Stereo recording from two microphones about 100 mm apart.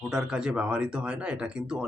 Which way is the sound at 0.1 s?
5° right (ahead or behind).